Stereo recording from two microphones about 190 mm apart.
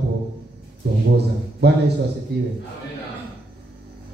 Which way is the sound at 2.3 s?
60° right (ahead or behind).